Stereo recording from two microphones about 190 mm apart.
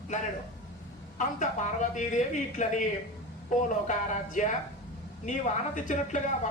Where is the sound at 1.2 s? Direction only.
40° left (ahead or behind).